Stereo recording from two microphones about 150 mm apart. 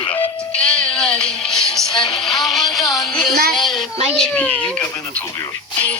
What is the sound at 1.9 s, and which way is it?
Music, 30° left (ahead or behind).